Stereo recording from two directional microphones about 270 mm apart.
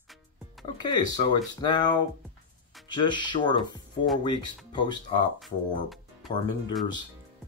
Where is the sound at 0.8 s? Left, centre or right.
Centre.